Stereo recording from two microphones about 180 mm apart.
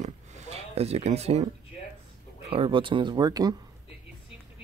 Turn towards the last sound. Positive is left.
turn(degrees=-20)  # may be behind; listen again after turning